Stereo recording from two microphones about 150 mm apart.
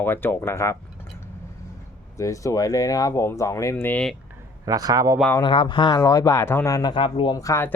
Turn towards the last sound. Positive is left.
turn(degrees=20)  # may be behind; listen again after turning